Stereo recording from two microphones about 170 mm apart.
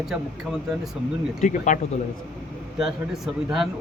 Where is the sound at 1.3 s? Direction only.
45° left (ahead or behind).